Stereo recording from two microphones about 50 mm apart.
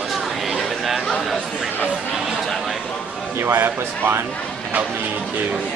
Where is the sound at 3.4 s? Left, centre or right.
Right.